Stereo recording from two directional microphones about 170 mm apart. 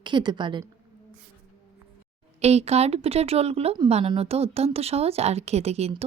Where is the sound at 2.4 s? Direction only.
40° right (ahead or behind).